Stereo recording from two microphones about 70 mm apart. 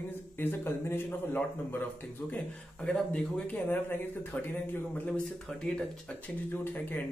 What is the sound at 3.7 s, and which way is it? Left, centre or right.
Speech, left.